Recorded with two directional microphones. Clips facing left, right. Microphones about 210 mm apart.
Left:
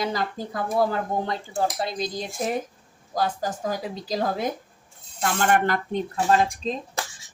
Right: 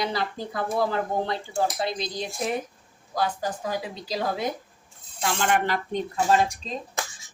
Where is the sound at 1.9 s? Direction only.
45° left (ahead or behind).